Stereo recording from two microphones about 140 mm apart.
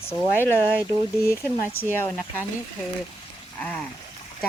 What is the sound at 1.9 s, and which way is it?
Speech, 15° left (ahead or behind).